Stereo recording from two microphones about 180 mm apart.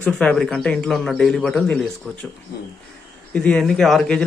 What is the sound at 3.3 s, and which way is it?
Speech, 5° left (ahead or behind).